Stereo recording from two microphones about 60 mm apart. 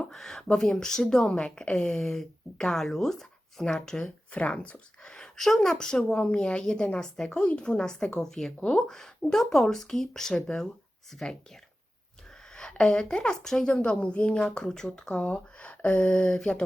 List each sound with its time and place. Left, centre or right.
0.0 s a sound: centre
0.4 s a woman's voice: centre
2.0 s speech: centre
4.3 s speech: left
12.5 s speech: centre